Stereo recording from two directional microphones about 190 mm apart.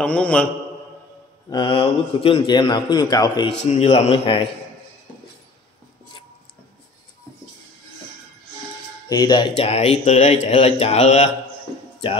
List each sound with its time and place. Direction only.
0.0 s mantra: 5° left (ahead or behind)
1.5 s a man's voice: 25° left (ahead or behind)
3.6 s speech: 35° left (ahead or behind)
9.1 s a man's voice: 20° left (ahead or behind)
9.6 s speech: 35° left (ahead or behind)